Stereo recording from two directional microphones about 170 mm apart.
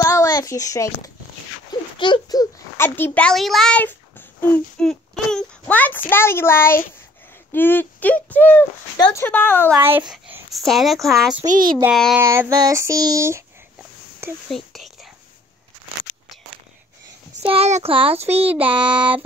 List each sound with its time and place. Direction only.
0.0 s a child's voice: 20° left (ahead or behind)
2.8 s a child's voice: 10° left (ahead or behind)
9.8 s speech: 10° right (ahead or behind)
11.4 s a child's voice: 50° right (ahead or behind)
11.9 s speech: centre (ahead or behind)
12.2 s child singing: 15° right (ahead or behind)
14.5 s whispering: centre (ahead or behind)
17.4 s speech: 35° right (ahead or behind)
18.5 s child singing: 10° right (ahead or behind)